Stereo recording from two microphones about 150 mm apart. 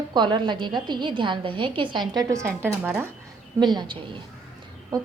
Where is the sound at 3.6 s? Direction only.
30° right (ahead or behind).